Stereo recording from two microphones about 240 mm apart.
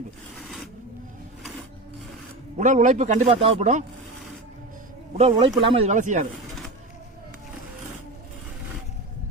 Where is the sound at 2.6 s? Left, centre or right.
Right.